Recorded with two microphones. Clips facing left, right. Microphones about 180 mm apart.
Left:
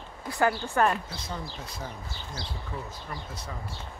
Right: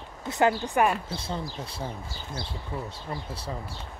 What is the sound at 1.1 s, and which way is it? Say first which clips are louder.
Speech: right 4 dB; 30° right (ahead or behind).